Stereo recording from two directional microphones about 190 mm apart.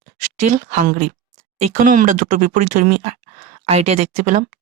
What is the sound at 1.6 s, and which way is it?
Speech, 40° right (ahead or behind).